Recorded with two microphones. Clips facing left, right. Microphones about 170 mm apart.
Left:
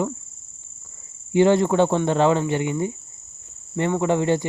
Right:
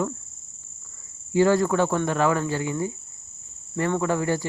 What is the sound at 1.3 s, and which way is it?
Speech, 20° left (ahead or behind).